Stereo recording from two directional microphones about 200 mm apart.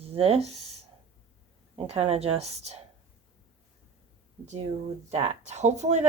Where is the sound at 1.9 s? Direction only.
30° right (ahead or behind).